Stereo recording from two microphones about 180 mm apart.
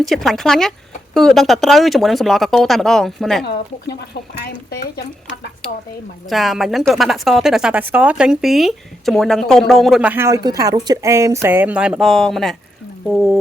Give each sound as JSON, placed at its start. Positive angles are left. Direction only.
{"t": 0.1, "sound": "a woman's voice", "side_deg": 0}
{"t": 3.4, "sound": "speech", "side_deg": 65}
{"t": 6.2, "sound": "a woman's voice", "side_deg": 0}